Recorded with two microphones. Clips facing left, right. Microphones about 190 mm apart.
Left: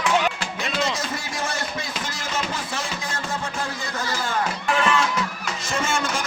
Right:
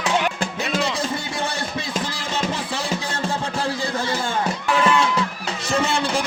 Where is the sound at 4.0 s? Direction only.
30° right (ahead or behind).